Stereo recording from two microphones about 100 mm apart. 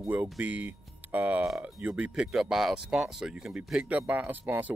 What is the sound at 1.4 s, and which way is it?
Speech, 5° right (ahead or behind).